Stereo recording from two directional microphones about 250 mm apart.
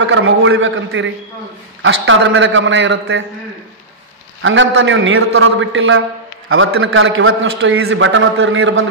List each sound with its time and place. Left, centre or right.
0.0 s a man's voice: right
4.4 s a man's voice: right